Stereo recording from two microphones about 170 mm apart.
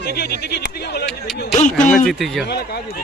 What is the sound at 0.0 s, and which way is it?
Speech, 75° left (ahead or behind).